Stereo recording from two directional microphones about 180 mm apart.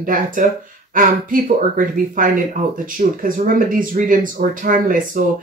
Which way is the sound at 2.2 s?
50° right (ahead or behind).